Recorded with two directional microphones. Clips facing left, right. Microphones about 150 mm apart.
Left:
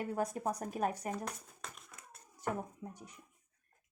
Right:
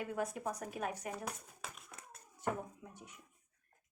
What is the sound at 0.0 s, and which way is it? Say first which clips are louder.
Speech: left 3 dB; 35° left (ahead or behind).